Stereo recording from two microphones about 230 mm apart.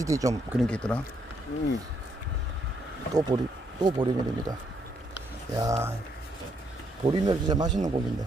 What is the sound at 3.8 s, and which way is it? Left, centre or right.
Speech, centre.